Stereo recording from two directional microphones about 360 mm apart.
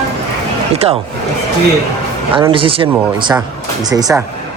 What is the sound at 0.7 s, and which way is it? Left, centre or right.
Speech, centre.